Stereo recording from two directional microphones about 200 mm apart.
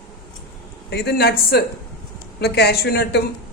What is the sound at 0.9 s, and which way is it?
A man's voice, 55° left (ahead or behind).